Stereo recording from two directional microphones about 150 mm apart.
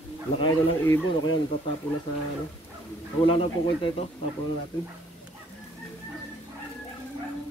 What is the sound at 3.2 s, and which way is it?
Speech, 35° left (ahead or behind).